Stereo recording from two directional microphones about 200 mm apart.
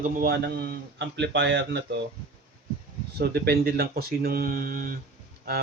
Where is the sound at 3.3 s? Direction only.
50° right (ahead or behind).